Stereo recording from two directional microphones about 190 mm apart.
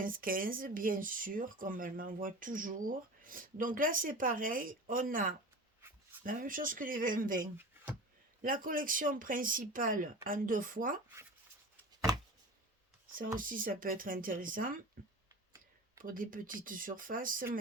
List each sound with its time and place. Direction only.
0.0 s speech: 45° right (ahead or behind)
13.1 s speech: 45° right (ahead or behind)
15.0 s a sound: 45° right (ahead or behind)
16.0 s speech: 45° right (ahead or behind)